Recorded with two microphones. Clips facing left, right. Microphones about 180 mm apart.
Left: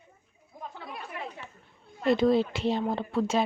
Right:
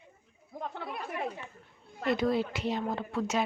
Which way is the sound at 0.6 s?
60° right (ahead or behind).